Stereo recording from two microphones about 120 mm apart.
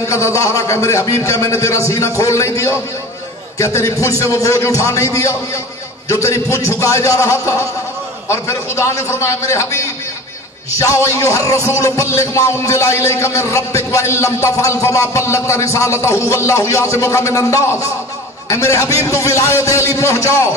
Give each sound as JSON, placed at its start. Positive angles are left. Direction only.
{"t": 0.0, "sound": "music", "side_deg": 25}